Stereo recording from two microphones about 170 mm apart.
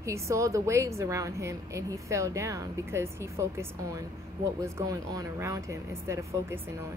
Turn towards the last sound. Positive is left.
turn(degrees=-15)  # may be behind; listen again after turning